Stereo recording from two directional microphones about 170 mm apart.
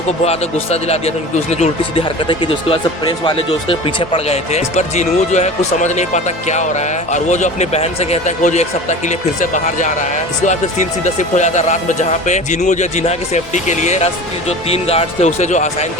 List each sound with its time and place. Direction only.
0.3 s a man's voice: 40° left (ahead or behind)